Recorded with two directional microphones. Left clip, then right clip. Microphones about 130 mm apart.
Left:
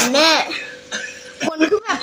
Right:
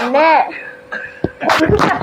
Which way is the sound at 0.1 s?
40° left (ahead or behind).